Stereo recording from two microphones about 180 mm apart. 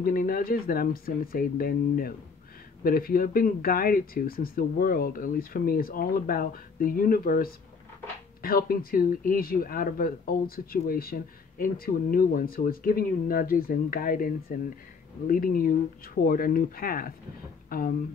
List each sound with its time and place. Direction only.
0.0 s speech: 50° left (ahead or behind)